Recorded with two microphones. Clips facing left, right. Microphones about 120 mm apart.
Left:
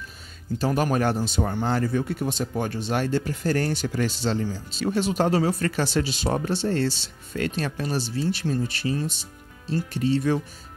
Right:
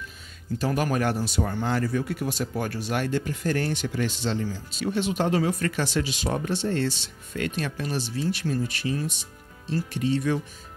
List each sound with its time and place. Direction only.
0.6 s speech: 30° left (ahead or behind)